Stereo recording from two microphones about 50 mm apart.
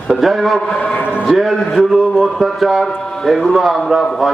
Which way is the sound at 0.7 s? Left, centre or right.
Left.